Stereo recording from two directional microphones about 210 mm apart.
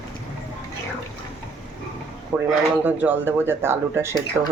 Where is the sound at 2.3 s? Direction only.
10° right (ahead or behind).